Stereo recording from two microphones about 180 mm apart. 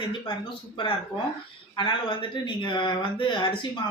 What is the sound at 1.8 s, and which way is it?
Speech, 25° left (ahead or behind).